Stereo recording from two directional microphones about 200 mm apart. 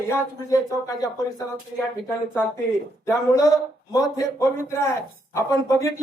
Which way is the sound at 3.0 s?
15° left (ahead or behind).